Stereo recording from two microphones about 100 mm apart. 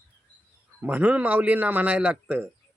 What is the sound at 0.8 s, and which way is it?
Speech, 15° right (ahead or behind).